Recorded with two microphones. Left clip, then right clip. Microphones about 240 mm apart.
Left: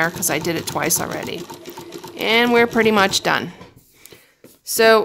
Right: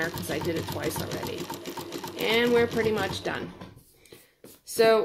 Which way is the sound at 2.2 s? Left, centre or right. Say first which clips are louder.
Left 8 dB; left.